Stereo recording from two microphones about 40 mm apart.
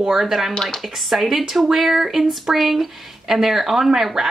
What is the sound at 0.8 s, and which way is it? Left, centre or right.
Speech, centre.